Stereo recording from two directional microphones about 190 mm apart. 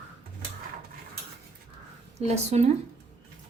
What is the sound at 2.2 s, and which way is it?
Speech, 35° right (ahead or behind).